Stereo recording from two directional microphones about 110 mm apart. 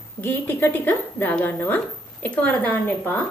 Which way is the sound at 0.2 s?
20° left (ahead or behind).